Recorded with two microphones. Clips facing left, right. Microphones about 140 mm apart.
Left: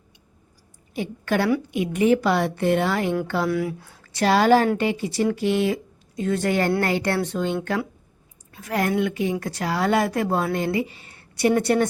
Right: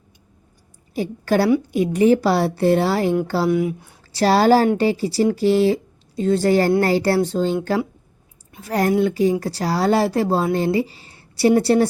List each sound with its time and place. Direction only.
0.9 s a woman's voice: 35° right (ahead or behind)
3.5 s speech: 20° right (ahead or behind)
4.1 s a woman's voice: 35° right (ahead or behind)
8.6 s a woman's voice: 35° right (ahead or behind)